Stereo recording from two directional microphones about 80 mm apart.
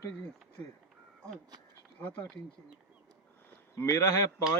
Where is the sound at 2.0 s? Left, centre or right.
Left.